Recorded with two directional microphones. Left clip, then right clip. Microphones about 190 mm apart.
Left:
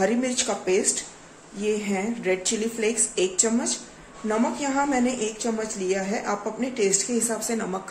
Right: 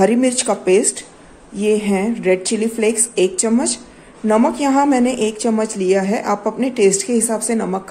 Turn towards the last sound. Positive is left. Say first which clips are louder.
# right 8 dB
turn(degrees=-35)  # may be behind; listen again after turning